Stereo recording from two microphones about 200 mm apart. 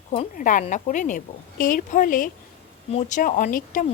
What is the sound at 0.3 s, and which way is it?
A woman's voice, 40° left (ahead or behind).